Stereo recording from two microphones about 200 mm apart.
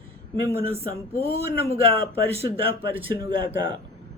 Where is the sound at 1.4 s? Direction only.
30° right (ahead or behind).